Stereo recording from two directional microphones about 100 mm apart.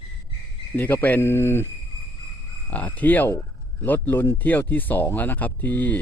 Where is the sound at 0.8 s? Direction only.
20° left (ahead or behind).